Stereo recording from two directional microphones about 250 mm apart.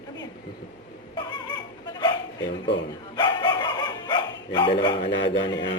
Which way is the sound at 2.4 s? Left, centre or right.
Left.